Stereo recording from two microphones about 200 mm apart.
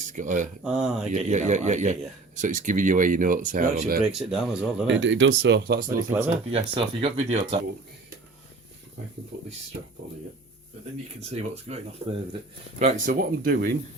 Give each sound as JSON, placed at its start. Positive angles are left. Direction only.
{"t": 0.0, "sound": "speech", "side_deg": -40}
{"t": 0.6, "sound": "speech", "side_deg": -5}
{"t": 1.1, "sound": "speech", "side_deg": -35}
{"t": 4.1, "sound": "speech", "side_deg": 0}
{"t": 4.9, "sound": "speech", "side_deg": -70}
{"t": 6.0, "sound": "speech", "side_deg": -15}
{"t": 6.5, "sound": "speech", "side_deg": -30}
{"t": 11.2, "sound": "speech", "side_deg": -30}
{"t": 12.8, "sound": "speech", "side_deg": -45}